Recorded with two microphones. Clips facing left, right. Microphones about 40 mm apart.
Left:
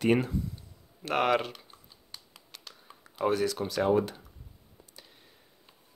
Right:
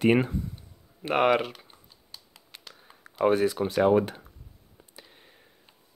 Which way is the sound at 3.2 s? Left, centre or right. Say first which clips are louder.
Right 5 dB; right.